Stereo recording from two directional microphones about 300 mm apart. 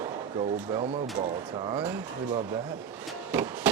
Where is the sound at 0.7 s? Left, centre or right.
Centre.